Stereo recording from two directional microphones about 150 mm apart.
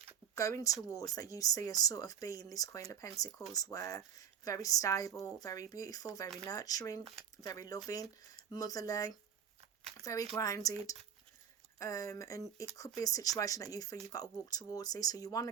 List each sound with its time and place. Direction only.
0.3 s speech: 20° left (ahead or behind)
6.2 s speech: 5° left (ahead or behind)
6.5 s speech: 25° left (ahead or behind)
11.8 s speech: 20° left (ahead or behind)